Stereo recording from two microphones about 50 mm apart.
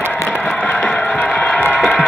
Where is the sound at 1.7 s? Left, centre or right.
Centre.